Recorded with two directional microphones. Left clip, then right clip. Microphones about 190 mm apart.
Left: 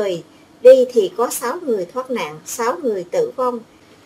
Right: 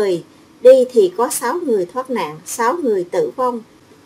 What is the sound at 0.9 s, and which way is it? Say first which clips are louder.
Speech: right 3 dB; 15° right (ahead or behind).